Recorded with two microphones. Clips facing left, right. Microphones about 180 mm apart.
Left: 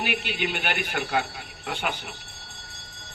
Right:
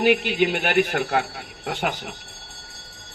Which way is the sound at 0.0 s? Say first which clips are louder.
Right 10 dB; 65° right (ahead or behind).